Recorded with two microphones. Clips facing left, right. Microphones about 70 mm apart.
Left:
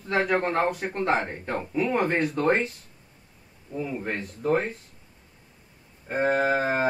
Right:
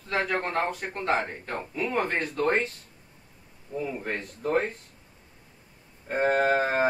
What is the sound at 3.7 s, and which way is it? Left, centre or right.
Speech, centre.